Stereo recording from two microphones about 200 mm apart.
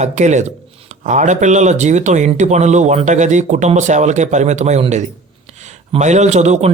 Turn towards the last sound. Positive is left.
turn(degrees=-35)  # may be behind; listen again after turning